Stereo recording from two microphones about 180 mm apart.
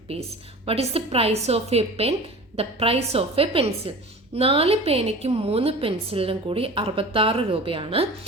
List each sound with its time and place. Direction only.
0.1 s a woman's voice: 35° right (ahead or behind)